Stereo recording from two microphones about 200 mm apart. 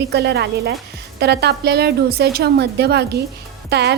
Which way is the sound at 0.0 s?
55° right (ahead or behind).